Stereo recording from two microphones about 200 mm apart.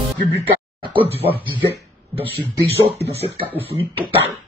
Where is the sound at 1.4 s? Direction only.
25° right (ahead or behind).